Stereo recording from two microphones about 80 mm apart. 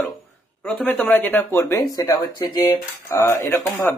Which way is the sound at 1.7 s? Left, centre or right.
Left.